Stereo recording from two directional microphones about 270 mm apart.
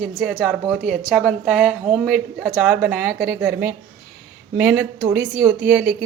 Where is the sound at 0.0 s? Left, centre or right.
Centre.